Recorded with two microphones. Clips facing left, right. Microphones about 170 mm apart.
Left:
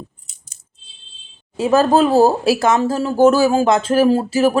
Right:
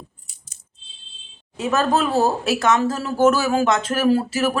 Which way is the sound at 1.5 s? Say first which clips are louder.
Left 6 dB; 30° left (ahead or behind).